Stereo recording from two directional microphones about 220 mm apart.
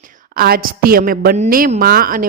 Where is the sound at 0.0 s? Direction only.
40° right (ahead or behind).